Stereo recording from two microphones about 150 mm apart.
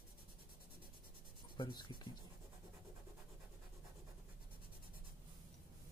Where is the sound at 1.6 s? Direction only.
30° left (ahead or behind).